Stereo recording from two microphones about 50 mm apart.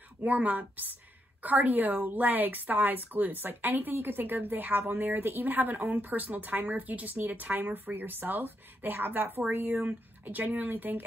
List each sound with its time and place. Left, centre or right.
0.2 s a woman's voice: right